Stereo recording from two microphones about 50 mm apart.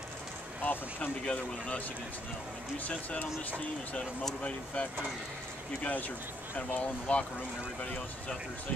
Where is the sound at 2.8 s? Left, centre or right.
Left.